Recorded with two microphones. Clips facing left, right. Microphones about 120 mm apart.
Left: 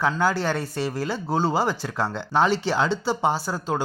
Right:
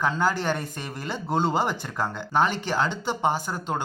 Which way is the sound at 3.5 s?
5° left (ahead or behind).